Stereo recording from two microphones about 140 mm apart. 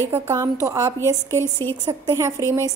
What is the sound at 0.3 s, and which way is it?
Speech, 20° right (ahead or behind).